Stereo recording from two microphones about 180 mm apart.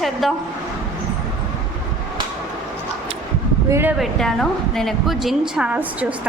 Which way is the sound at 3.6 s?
15° right (ahead or behind).